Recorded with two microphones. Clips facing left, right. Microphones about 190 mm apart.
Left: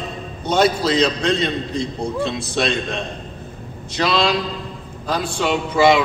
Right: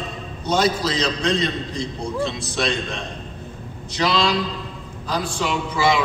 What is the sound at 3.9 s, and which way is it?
Speech, 55° left (ahead or behind).